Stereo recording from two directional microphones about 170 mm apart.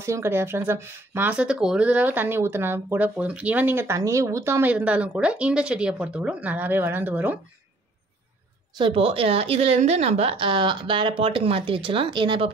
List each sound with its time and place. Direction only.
0.0 s speech: 15° right (ahead or behind)
8.7 s a woman's voice: 30° right (ahead or behind)